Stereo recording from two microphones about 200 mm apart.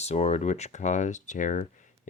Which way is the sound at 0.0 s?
35° left (ahead or behind).